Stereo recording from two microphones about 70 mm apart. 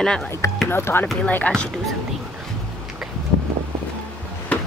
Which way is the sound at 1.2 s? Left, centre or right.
Left.